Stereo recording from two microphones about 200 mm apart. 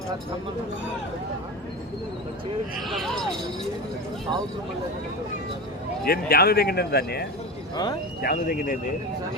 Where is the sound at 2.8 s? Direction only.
Centre (ahead or behind).